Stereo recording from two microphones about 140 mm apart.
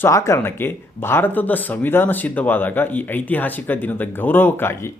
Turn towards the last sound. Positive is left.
turn(degrees=15)  # may be behind; listen again after turning